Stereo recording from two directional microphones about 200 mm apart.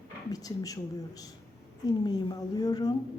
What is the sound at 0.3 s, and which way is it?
A woman's voice, 20° left (ahead or behind).